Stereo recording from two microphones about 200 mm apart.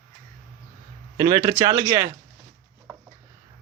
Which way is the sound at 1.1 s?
20° right (ahead or behind).